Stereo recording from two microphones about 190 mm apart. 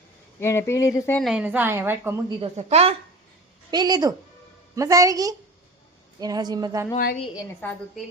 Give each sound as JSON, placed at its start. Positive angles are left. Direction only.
{"t": 0.3, "sound": "speech", "side_deg": 15}
{"t": 1.2, "sound": "a woman's voice", "side_deg": -5}
{"t": 2.4, "sound": "a woman's voice", "side_deg": -35}
{"t": 3.7, "sound": "a woman's voice", "side_deg": -20}
{"t": 6.9, "sound": "a woman's voice", "side_deg": 50}